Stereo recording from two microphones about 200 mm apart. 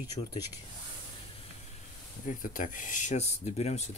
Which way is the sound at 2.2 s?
40° left (ahead or behind).